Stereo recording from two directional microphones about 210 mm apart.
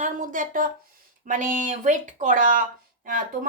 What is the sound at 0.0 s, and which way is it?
Speech, 40° right (ahead or behind).